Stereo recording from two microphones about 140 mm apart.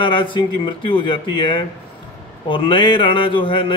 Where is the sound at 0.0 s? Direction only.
35° left (ahead or behind).